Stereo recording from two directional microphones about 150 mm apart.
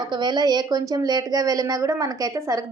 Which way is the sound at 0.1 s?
30° right (ahead or behind).